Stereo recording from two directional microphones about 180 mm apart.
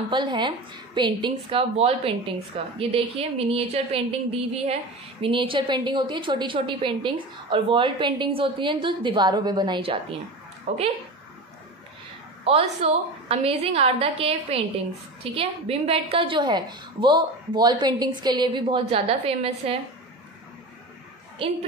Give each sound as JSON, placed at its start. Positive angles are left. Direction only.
{"t": 0.1, "sound": "a woman's voice", "side_deg": -25}
{"t": 12.4, "sound": "a woman's voice", "side_deg": -35}
{"t": 21.4, "sound": "a woman's voice", "side_deg": -30}